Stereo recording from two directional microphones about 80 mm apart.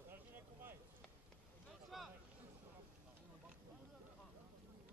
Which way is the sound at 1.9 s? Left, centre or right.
Centre.